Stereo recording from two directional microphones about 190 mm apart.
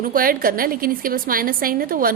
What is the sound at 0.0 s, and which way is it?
A woman's voice, 50° right (ahead or behind).